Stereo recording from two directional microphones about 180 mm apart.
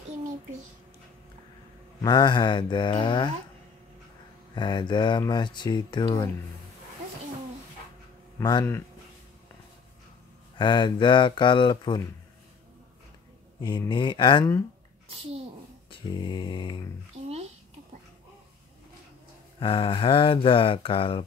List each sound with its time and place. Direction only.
2.0 s speech: 25° left (ahead or behind)
4.6 s speech: 25° left (ahead or behind)
8.4 s speech: 20° left (ahead or behind)
10.6 s speech: 25° left (ahead or behind)
13.6 s speech: 25° left (ahead or behind)
15.9 s speech: 25° left (ahead or behind)
19.6 s speech: 30° left (ahead or behind)